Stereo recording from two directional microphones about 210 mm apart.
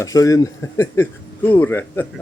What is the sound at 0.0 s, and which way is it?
A man's voice, 15° left (ahead or behind).